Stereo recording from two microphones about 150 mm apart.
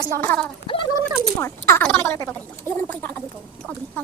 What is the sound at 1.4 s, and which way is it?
Speech, 15° left (ahead or behind).